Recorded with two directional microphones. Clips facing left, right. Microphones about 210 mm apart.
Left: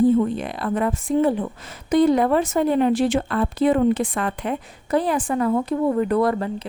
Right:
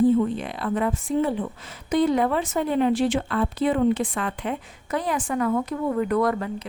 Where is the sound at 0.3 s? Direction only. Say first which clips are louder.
Left 2 dB; 45° left (ahead or behind).